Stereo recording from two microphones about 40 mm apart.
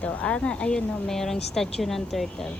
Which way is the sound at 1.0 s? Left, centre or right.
Centre.